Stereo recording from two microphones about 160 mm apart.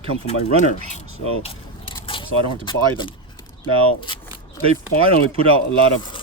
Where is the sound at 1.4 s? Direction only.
35° left (ahead or behind).